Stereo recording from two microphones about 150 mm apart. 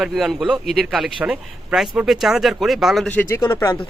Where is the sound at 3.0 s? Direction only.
10° left (ahead or behind).